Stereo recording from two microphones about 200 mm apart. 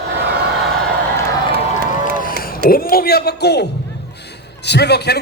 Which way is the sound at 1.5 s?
45° right (ahead or behind).